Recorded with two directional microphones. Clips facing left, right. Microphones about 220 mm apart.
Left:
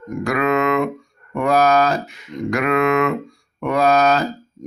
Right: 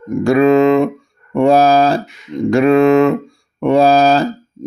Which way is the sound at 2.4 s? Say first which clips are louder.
Right 8 dB; 30° right (ahead or behind).